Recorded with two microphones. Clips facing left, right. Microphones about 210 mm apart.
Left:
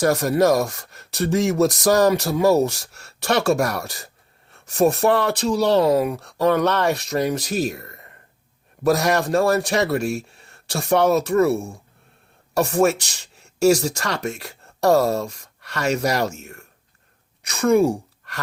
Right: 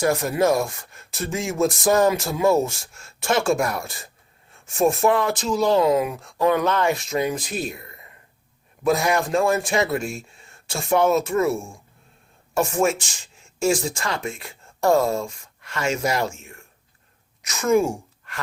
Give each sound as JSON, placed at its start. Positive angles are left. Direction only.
{"t": 0.0, "sound": "speech", "side_deg": 40}
{"t": 6.1, "sound": "speech", "side_deg": 70}
{"t": 6.4, "sound": "speech", "side_deg": 40}